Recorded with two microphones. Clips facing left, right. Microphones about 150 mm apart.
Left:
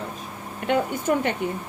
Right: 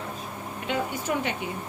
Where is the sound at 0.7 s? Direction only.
55° left (ahead or behind).